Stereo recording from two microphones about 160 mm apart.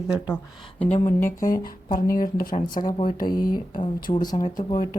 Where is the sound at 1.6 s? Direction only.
60° left (ahead or behind).